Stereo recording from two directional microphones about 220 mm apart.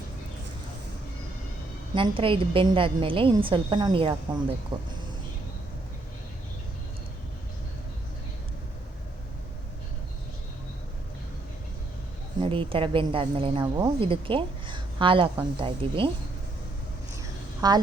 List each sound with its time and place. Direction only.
2.0 s speech: 25° right (ahead or behind)
12.4 s speech: 25° right (ahead or behind)
17.2 s a sound: 15° right (ahead or behind)